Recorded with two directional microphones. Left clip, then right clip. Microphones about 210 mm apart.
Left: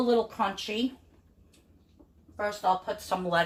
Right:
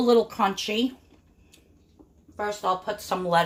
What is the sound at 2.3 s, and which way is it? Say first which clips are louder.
Speech: right 1 dB; 50° right (ahead or behind).